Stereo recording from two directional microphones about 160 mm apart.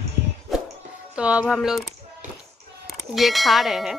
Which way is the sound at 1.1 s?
5° right (ahead or behind).